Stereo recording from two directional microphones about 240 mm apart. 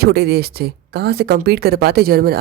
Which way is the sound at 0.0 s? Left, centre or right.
Right.